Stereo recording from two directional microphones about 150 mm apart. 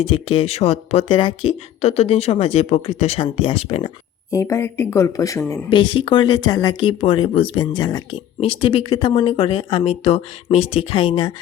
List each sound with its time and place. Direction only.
0.1 s speech: 35° left (ahead or behind)
4.3 s speech: 20° left (ahead or behind)
5.7 s speech: 35° left (ahead or behind)